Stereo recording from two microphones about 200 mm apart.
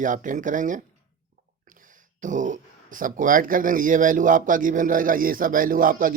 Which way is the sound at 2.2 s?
40° right (ahead or behind).